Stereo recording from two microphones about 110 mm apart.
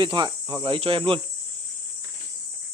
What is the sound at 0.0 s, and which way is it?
Speech, 40° right (ahead or behind).